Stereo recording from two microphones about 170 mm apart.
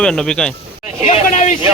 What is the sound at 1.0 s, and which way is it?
Speech, 45° left (ahead or behind).